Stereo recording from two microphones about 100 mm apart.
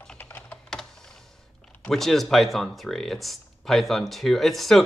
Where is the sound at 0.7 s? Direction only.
5° left (ahead or behind).